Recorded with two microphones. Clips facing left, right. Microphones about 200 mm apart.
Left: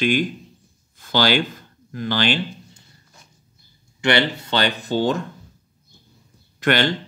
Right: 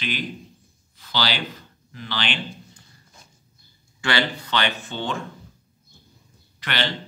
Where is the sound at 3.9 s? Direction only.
25° left (ahead or behind); by 5.2 s 40° left (ahead or behind).